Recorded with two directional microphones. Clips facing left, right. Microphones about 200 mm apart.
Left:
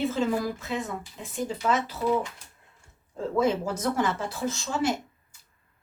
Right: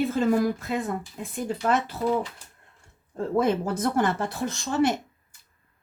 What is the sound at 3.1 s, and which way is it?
Speech, 55° right (ahead or behind).